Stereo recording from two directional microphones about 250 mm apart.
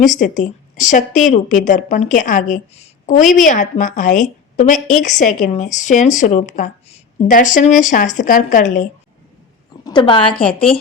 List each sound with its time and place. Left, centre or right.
0.2 s a woman's voice: left
9.8 s a woman's voice: centre